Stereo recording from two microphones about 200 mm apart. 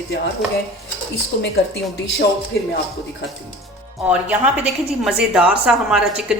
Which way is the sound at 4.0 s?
5° right (ahead or behind).